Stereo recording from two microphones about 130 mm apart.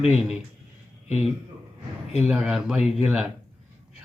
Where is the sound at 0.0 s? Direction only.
5° right (ahead or behind).